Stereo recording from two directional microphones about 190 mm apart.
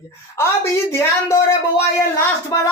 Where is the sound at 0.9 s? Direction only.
15° left (ahead or behind).